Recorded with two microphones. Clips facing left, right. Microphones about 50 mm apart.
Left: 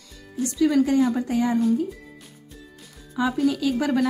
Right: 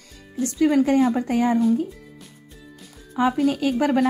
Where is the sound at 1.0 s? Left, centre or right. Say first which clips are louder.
Right 1 dB; right.